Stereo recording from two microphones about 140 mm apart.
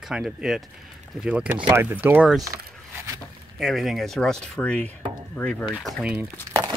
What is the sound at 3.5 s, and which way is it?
Speech, centre (ahead or behind).